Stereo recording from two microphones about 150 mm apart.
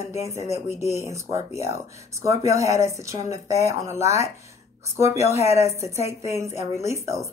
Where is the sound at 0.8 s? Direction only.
45° left (ahead or behind).